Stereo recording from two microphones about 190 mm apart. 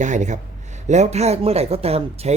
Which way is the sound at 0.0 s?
40° right (ahead or behind).